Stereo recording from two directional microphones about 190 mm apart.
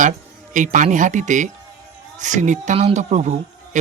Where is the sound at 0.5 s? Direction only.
40° right (ahead or behind).